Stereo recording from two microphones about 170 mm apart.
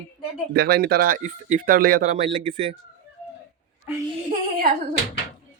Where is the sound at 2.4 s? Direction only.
30° right (ahead or behind).